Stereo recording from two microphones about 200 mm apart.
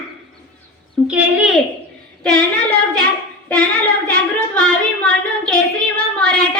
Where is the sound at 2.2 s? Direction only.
5° left (ahead or behind).